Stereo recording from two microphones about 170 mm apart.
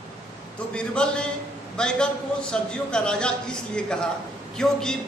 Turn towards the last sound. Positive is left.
turn(degrees=5)  # may be behind; listen again after turning